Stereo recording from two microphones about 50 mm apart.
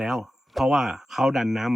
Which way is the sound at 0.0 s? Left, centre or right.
Centre.